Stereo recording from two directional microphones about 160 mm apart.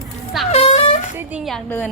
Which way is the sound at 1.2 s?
10° right (ahead or behind).